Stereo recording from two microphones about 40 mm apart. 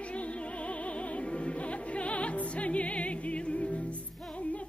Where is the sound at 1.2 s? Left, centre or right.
Left.